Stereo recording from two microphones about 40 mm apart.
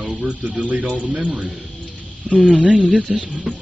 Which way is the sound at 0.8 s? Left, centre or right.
Centre.